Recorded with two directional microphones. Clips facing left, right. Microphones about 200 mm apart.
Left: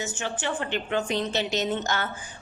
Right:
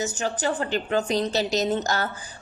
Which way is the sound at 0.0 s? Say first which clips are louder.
Right 5 dB; 40° right (ahead or behind).